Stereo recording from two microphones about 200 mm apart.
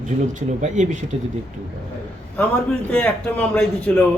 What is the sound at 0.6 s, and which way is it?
Speech, 35° right (ahead or behind).